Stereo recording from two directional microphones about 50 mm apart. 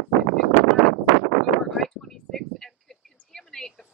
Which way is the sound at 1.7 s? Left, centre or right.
Centre.